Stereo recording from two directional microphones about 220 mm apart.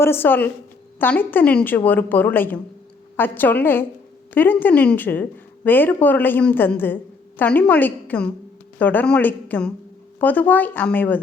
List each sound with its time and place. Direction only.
0.0 s a woman's voice: 10° left (ahead or behind)